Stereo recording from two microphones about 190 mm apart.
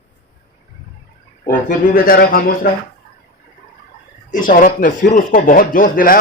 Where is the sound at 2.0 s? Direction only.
50° left (ahead or behind).